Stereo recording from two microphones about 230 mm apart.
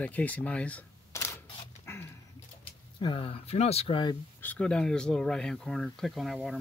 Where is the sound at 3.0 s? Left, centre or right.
Left.